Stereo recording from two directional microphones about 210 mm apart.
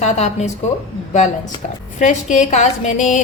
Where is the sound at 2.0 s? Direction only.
35° left (ahead or behind).